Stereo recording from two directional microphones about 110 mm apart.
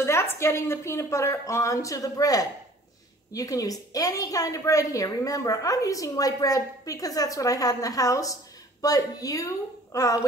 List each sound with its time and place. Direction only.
0.0 s a woman's voice: 25° left (ahead or behind)